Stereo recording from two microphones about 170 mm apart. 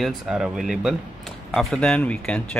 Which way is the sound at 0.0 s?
Centre (ahead or behind).